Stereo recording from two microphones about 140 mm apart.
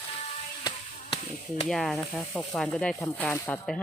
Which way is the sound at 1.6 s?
Centre (ahead or behind).